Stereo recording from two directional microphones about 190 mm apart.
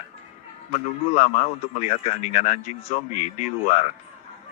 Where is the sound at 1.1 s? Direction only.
35° left (ahead or behind).